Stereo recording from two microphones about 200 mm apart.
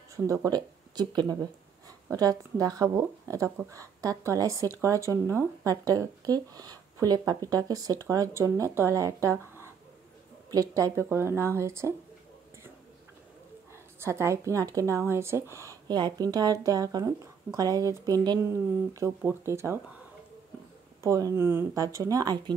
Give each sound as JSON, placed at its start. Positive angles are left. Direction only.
{"t": 0.1, "sound": "speech", "side_deg": -15}
{"t": 13.9, "sound": "speech", "side_deg": -15}
{"t": 21.0, "sound": "speech", "side_deg": -15}